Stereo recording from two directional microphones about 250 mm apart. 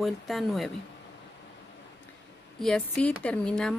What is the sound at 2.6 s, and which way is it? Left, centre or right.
Speech, centre.